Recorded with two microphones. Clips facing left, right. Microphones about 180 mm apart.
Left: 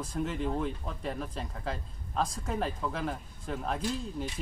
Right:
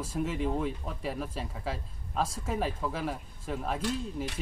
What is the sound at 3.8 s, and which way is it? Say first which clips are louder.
Speech: right 1 dB; 70° right (ahead or behind).